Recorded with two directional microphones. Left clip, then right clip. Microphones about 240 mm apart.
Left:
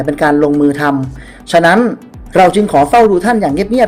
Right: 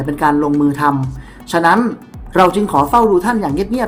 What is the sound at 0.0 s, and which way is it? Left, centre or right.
Speech, centre.